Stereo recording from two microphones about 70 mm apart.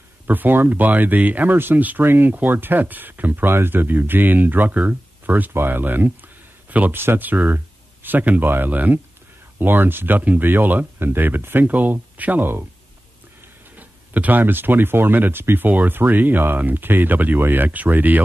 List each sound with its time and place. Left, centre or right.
0.3 s speech: right
13.7 s speech: right